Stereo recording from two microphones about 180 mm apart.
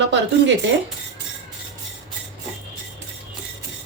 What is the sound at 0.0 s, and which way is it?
Speech, 80° right.